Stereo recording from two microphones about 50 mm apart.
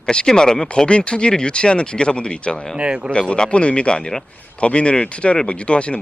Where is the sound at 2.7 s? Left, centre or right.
Right.